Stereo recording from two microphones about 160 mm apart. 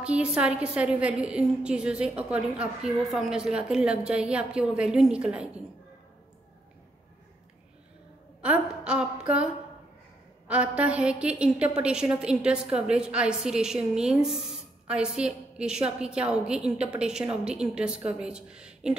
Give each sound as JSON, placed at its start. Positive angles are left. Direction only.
{"t": 0.0, "sound": "a woman's voice", "side_deg": -5}
{"t": 8.4, "sound": "a sound", "side_deg": -5}
{"t": 10.5, "sound": "a woman's voice", "side_deg": -5}